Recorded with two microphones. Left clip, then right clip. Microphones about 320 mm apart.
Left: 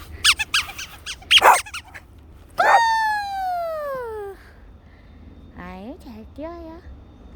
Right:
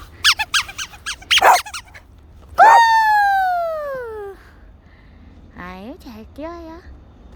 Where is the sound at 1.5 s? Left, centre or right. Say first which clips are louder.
Right 4 dB; centre.